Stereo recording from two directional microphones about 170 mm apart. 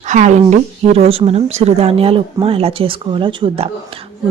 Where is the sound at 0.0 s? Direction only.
45° right (ahead or behind).